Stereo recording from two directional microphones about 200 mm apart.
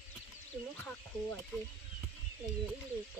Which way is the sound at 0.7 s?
10° left (ahead or behind).